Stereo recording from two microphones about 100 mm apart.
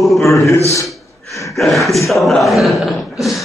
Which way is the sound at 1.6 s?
Centre (ahead or behind).